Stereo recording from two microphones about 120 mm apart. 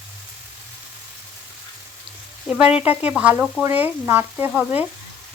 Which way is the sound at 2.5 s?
10° right (ahead or behind).